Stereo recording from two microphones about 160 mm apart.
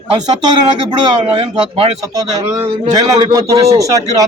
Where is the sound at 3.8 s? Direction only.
20° right (ahead or behind).